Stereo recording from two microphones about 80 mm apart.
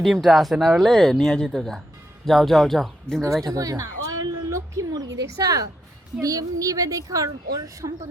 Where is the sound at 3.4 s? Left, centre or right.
Right.